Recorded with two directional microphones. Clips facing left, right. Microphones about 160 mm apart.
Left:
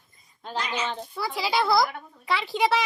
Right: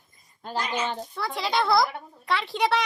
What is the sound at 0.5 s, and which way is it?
Speech, 50° right (ahead or behind).